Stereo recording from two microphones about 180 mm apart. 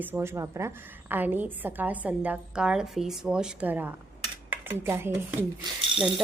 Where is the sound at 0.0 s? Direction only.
10° right (ahead or behind).